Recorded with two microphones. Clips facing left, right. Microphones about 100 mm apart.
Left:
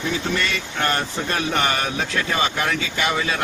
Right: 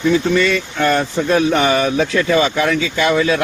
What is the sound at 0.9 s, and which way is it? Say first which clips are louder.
Speech: right 9 dB; 85° right.